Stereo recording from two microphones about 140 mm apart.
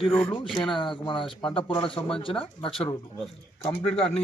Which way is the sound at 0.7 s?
35° left (ahead or behind).